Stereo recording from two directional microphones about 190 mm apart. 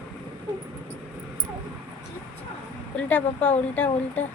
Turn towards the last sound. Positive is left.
turn(degrees=5)  # may be behind; listen again after turning